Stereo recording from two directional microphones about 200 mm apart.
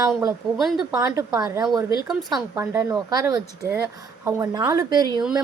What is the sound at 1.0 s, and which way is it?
Speech, 20° right (ahead or behind).